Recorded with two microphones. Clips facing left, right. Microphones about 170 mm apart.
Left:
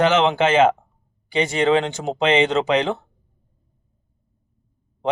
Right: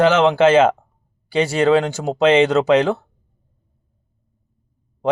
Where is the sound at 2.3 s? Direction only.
15° left (ahead or behind).